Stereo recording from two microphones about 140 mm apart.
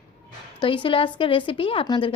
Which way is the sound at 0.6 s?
35° left (ahead or behind).